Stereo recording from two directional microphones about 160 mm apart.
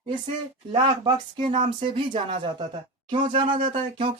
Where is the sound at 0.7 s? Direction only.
30° right (ahead or behind).